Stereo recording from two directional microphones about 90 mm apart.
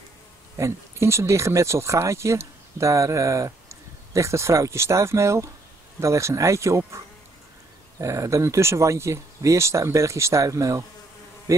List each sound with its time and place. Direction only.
0.6 s speech: 30° right (ahead or behind)
8.0 s speech: 35° right (ahead or behind)